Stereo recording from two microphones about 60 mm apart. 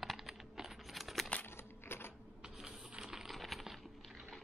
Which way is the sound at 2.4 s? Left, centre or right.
Centre.